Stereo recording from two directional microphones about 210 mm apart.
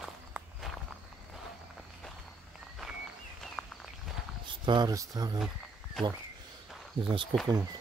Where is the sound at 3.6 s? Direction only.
5° left (ahead or behind).